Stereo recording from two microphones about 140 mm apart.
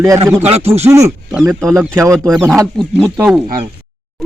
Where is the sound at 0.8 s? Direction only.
20° right (ahead or behind).